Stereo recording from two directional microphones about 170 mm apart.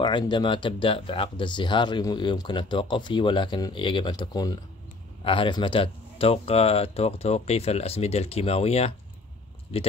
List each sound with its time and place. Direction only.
0.0 s speech: 25° left (ahead or behind)